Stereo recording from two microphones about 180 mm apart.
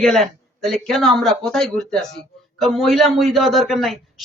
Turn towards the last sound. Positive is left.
turn(degrees=0)  # may be behind; listen again after turning